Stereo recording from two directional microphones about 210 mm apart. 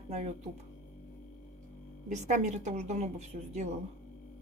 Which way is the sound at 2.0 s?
35° right (ahead or behind).